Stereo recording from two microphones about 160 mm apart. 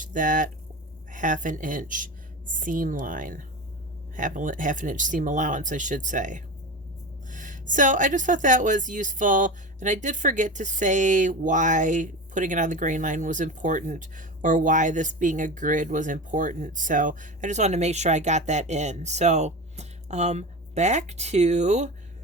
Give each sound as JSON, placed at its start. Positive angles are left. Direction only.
{"t": 0.0, "sound": "a woman's voice", "side_deg": -55}